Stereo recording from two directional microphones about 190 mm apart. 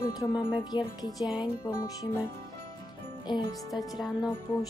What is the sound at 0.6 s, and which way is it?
Speech, 20° left (ahead or behind).